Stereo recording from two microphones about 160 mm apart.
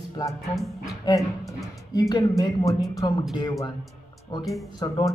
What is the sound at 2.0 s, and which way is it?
Speech, 25° left (ahead or behind).